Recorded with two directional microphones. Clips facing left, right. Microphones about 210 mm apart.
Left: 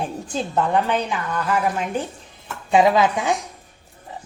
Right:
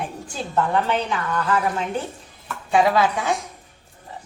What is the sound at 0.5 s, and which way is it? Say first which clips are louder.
A woman's voice: even; 15° left (ahead or behind).